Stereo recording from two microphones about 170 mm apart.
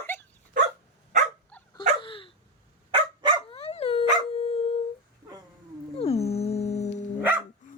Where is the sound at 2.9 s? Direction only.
30° right (ahead or behind).